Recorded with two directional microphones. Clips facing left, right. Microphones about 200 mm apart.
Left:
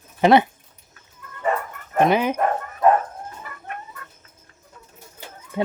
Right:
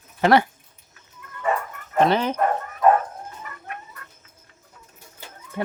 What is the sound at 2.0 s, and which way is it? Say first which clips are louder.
Speech: left 1 dB; 10° left (ahead or behind).